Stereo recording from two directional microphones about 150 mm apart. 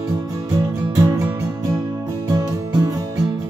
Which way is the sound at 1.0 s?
20° right (ahead or behind).